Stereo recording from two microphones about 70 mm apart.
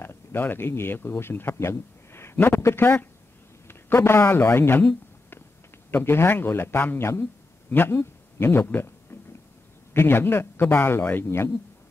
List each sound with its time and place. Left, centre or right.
0.0 s speech: left
1.5 s a sound: left
2.3 s a man's voice: left